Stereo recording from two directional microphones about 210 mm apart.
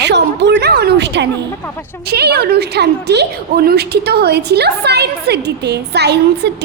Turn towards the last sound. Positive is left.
turn(degrees=-50)  # may be behind; listen again after turning